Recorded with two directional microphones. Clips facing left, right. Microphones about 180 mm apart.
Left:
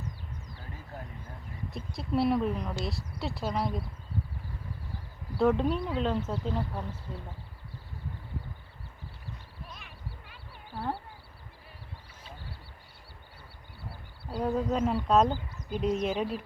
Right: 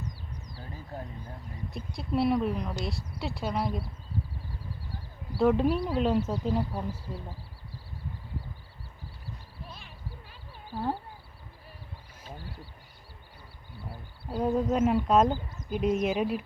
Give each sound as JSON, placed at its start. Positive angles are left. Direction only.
{"t": 1.7, "sound": "a woman's voice", "side_deg": 0}
{"t": 5.3, "sound": "speech", "side_deg": -5}
{"t": 9.6, "sound": "a sound", "side_deg": -30}
{"t": 13.9, "sound": "speech", "side_deg": -15}